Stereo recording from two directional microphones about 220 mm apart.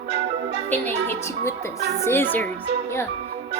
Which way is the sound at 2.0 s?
10° left (ahead or behind).